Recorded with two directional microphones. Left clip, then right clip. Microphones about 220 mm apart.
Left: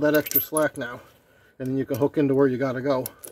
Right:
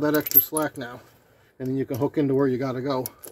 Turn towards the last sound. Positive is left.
turn(degrees=25)  # may be behind; listen again after turning